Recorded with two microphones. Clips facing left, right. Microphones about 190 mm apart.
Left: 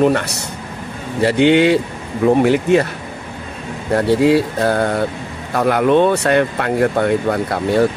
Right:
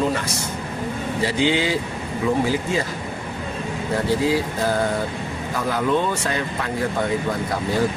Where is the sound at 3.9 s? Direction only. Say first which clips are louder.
Left 8 dB; 65° left (ahead or behind).